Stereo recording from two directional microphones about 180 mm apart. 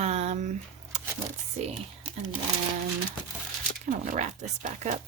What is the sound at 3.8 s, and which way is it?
Speech, 45° right (ahead or behind).